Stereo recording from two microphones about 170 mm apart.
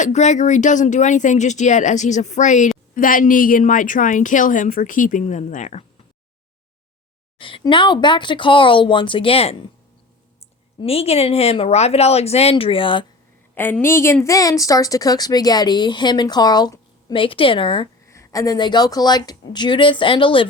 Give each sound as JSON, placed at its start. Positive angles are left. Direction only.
{"t": 0.0, "sound": "speech", "side_deg": 45}
{"t": 7.3, "sound": "a woman's voice", "side_deg": 30}
{"t": 10.8, "sound": "speech", "side_deg": 35}
{"t": 13.6, "sound": "a woman's voice", "side_deg": 10}
{"t": 18.0, "sound": "a woman's voice", "side_deg": 20}